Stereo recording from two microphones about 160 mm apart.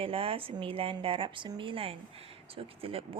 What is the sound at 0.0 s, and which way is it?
Speech, 35° right (ahead or behind).